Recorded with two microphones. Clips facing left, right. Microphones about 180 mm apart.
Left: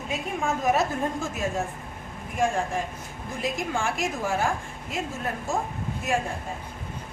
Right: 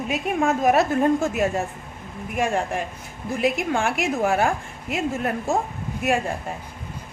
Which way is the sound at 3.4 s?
65° right (ahead or behind).